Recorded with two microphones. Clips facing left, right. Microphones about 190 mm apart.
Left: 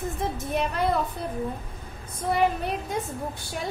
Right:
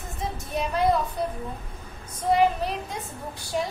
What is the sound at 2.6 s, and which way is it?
Speech, 55° left (ahead or behind).